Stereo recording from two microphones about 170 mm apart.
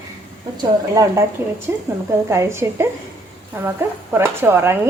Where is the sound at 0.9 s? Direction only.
20° right (ahead or behind).